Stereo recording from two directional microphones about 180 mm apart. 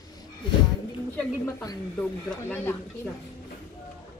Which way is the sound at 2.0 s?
10° left (ahead or behind).